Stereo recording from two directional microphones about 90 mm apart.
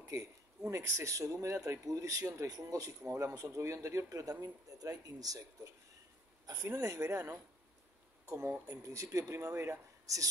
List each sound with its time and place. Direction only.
0.1 s speech: 40° right (ahead or behind)
3.0 s speech: 30° right (ahead or behind)